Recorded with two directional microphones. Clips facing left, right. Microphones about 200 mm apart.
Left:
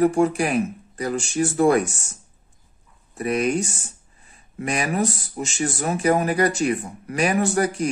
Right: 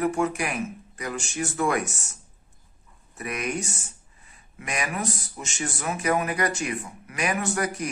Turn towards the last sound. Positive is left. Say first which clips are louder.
# left 6 dB
turn(degrees=30)  # may be behind; listen again after turning